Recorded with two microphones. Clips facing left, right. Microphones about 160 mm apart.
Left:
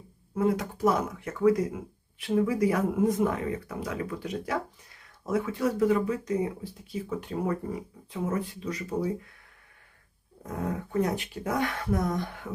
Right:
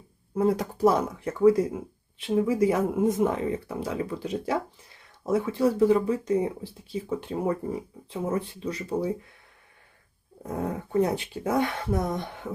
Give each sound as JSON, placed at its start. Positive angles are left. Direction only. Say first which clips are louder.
{"t": 0.3, "sound": "speech", "louder": "right 2 dB", "side_deg": -35}
{"t": 10.4, "sound": "speech", "louder": "right 2 dB", "side_deg": -30}